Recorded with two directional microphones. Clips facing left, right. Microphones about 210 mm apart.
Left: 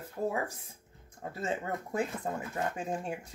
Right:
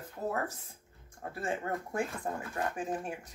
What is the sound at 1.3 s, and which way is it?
Speech, 20° left (ahead or behind).